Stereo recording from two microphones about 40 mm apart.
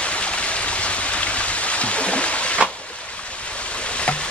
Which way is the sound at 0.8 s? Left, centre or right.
Left.